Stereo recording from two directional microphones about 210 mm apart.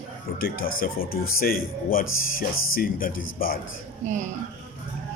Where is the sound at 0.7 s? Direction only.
45° left (ahead or behind).